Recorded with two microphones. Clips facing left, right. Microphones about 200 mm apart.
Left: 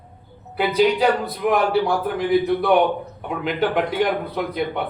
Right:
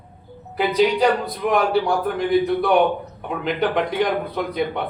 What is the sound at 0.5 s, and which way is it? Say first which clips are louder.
A man's voice: even; 5° left (ahead or behind).